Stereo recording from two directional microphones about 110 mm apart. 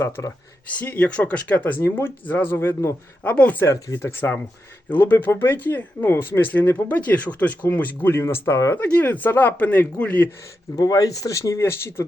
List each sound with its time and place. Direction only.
0.0 s speech: 30° left (ahead or behind)
0.7 s speech: 15° left (ahead or behind)
10.8 s speech: 35° left (ahead or behind)